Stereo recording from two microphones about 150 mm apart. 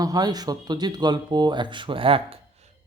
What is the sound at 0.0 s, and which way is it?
Speech, 25° right (ahead or behind).